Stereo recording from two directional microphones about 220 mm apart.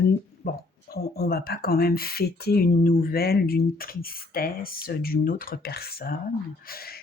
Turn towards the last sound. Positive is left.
turn(degrees=45)  # may be behind; listen again after turning